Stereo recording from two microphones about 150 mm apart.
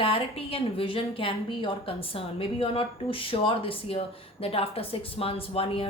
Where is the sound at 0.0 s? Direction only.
40° left (ahead or behind).